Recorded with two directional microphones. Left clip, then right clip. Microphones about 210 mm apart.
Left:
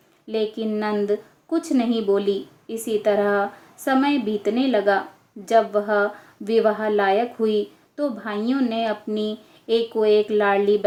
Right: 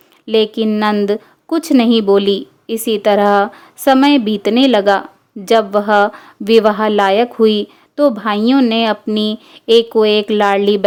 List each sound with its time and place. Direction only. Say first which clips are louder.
0.3 s a woman's voice: right 11 dB; 55° right (ahead or behind)